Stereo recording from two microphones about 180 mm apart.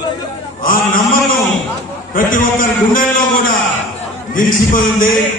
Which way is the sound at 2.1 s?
50° left (ahead or behind).